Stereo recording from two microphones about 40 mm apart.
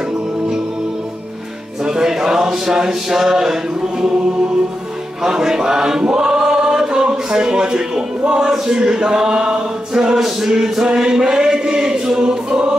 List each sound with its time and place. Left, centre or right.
1.9 s speech: centre
5.2 s choir: centre
8.3 s chant: right